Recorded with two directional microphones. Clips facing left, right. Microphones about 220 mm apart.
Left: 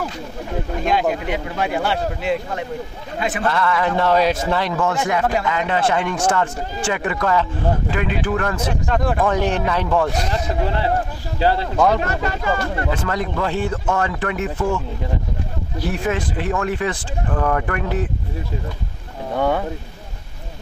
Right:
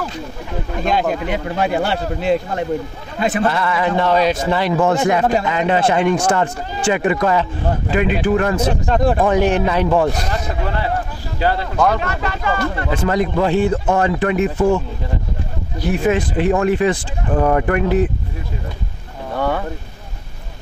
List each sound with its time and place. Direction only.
1.3 s a man's voice: 35° right (ahead or behind)
3.4 s speech: 10° right (ahead or behind)
4.7 s speech: 25° right (ahead or behind)
8.5 s a man's voice: 35° right (ahead or behind)
9.3 s speech: 10° right (ahead or behind)
10.3 s speech: 25° left (ahead or behind)
12.0 s speech: 45° left (ahead or behind)
13.1 s speech: 15° right (ahead or behind)
16.1 s speech: 15° right (ahead or behind)
19.3 s speech: 15° left (ahead or behind)